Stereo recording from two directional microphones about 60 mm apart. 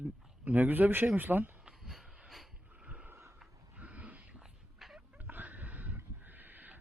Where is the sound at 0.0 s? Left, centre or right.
Right.